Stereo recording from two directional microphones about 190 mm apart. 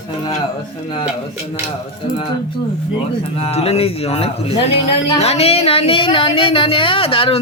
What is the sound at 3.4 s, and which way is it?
Speech, 30° left (ahead or behind).